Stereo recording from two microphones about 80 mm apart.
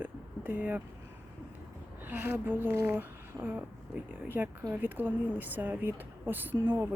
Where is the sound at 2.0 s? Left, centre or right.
Right.